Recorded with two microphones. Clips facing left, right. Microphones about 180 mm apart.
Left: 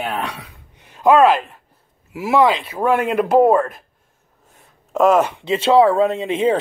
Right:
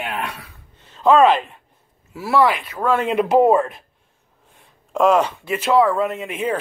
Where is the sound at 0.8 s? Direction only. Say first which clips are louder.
Left 1 dB; 10° left (ahead or behind).